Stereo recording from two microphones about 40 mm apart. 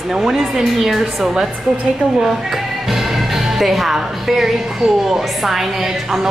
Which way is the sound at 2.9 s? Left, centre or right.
Centre.